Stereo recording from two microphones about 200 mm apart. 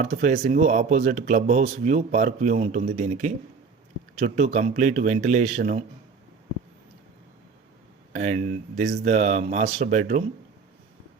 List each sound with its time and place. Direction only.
0.0 s a man's voice: 35° right (ahead or behind)
8.1 s a man's voice: 40° right (ahead or behind)